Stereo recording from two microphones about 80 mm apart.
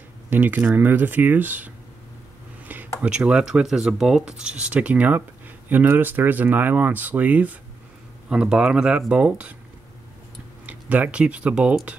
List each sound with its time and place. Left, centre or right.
0.3 s speech: right
2.6 s a sound: right
3.0 s speech: centre
10.7 s speech: centre